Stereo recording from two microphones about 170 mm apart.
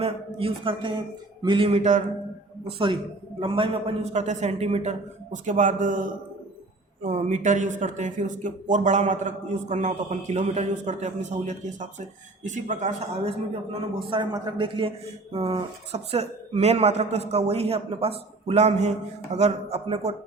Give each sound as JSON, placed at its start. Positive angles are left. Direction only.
{"t": 0.0, "sound": "speech", "side_deg": -35}
{"t": 2.6, "sound": "speech", "side_deg": -30}
{"t": 14.1, "sound": "speech", "side_deg": -25}